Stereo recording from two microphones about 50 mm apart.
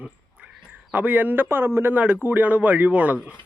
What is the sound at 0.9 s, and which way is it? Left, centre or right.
Speech, right.